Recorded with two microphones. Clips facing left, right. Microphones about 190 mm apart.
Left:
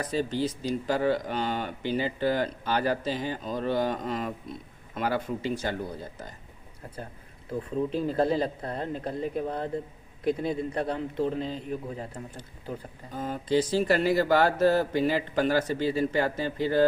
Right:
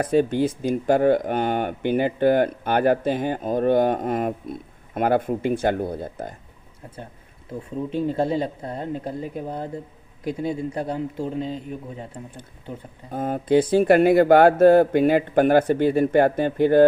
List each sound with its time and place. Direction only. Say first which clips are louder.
0.0 s speech: right 8 dB; 55° right (ahead or behind)
7.5 s a man's voice: right 1 dB; centre (ahead or behind)
13.1 s speech: right 7 dB; 55° right (ahead or behind)